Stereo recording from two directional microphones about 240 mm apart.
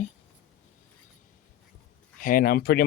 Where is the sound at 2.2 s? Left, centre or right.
Left.